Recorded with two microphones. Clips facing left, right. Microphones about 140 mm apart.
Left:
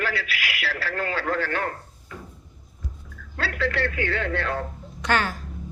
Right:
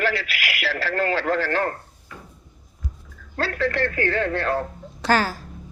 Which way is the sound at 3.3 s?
40° right (ahead or behind).